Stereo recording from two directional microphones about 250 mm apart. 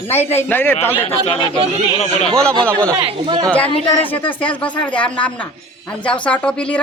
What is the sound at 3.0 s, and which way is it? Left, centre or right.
Speech, right.